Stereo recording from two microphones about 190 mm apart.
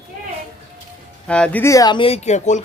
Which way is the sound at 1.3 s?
5° left (ahead or behind).